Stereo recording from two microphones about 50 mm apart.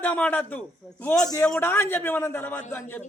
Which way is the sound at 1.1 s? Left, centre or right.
Centre.